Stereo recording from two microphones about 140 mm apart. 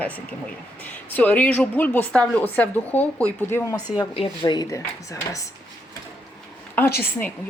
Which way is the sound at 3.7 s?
30° left (ahead or behind).